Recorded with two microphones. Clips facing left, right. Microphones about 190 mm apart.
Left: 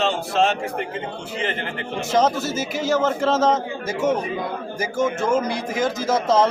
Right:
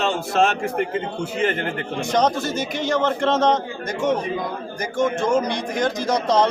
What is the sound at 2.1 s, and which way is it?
Speech, 5° left (ahead or behind).